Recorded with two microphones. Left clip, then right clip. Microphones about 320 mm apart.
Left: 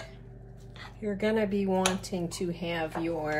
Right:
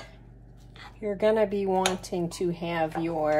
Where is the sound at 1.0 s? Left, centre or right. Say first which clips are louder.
Right 5 dB; centre.